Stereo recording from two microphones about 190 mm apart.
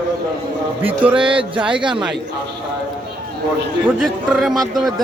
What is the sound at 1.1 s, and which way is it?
Speech, 25° right (ahead or behind).